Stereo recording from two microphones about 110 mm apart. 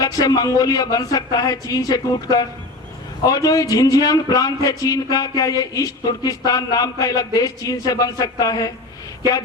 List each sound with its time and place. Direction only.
0.0 s a man's voice: 35° left (ahead or behind)